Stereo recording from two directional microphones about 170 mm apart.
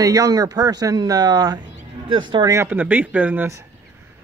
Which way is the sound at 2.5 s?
15° right (ahead or behind).